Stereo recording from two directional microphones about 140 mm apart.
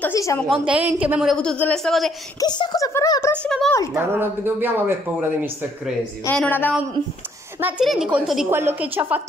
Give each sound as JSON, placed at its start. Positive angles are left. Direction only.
{"t": 0.1, "sound": "a woman's voice", "side_deg": 25}
{"t": 0.5, "sound": "speech", "side_deg": -10}
{"t": 1.3, "sound": "speech", "side_deg": 5}
{"t": 2.4, "sound": "a woman's voice", "side_deg": 30}
{"t": 3.4, "sound": "speech", "side_deg": 5}
{"t": 3.9, "sound": "speech", "side_deg": -15}
{"t": 6.2, "sound": "a woman's voice", "side_deg": 10}
{"t": 7.8, "sound": "speech", "side_deg": 0}
{"t": 8.5, "sound": "speech", "side_deg": -15}